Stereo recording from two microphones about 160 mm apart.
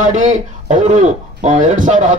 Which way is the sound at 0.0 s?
50° right (ahead or behind).